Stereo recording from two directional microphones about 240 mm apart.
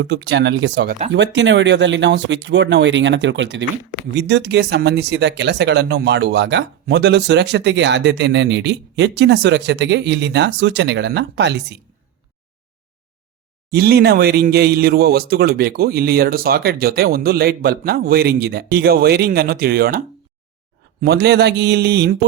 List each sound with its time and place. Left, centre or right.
0.0 s speech: right
13.7 s speech: right
21.0 s speech: right